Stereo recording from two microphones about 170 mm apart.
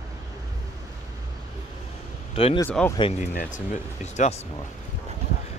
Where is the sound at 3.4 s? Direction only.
50° left (ahead or behind).